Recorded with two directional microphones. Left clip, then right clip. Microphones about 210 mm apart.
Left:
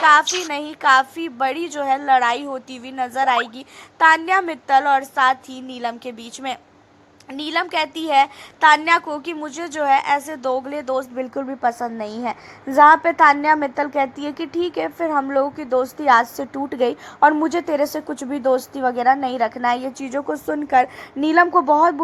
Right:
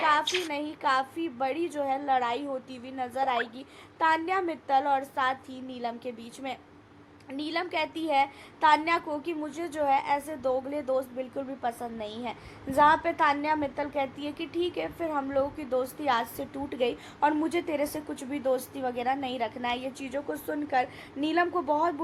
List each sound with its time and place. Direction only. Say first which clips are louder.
0.0 s a woman's voice: left 11 dB; 10° left (ahead or behind); by 21.9 s 25° left (ahead or behind)